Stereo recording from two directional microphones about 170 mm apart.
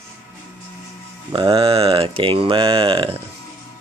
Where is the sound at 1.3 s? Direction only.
30° right (ahead or behind).